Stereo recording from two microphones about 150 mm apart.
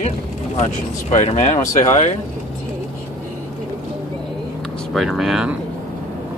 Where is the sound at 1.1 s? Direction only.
45° left (ahead or behind).